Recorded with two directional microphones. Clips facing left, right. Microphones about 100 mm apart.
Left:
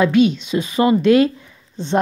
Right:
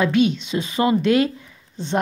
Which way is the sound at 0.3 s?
25° right (ahead or behind).